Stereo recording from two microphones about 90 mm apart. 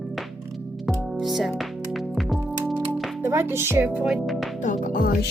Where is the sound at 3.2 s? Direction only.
30° right (ahead or behind).